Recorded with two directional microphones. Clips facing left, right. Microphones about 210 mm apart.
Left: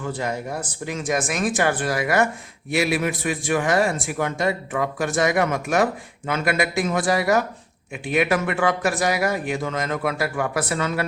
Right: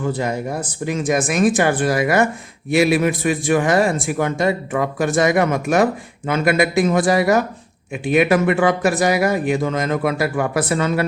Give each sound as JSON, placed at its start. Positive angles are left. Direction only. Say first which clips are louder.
{"t": 0.1, "sound": "a man's voice", "louder": "right 5 dB", "side_deg": -15}